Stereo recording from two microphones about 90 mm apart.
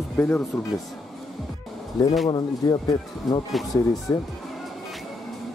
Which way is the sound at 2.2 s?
50° left (ahead or behind).